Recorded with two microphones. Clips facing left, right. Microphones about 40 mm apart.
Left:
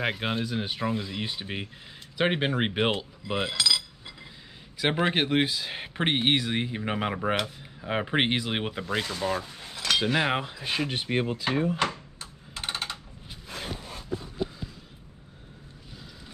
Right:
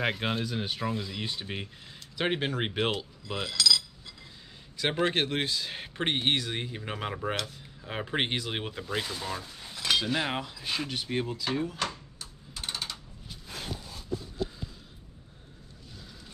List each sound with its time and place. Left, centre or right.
0.0 s speech: centre
8.8 s speech: centre
9.2 s speech: centre
12.5 s typing: left
13.5 s a sound: left
13.7 s a sound: left